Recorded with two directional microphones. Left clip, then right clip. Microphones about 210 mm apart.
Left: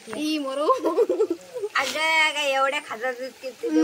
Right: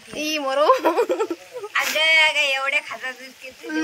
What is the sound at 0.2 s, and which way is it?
Speech, 5° left (ahead or behind).